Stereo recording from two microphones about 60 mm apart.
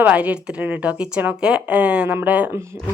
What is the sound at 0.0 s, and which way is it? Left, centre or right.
Speech, right.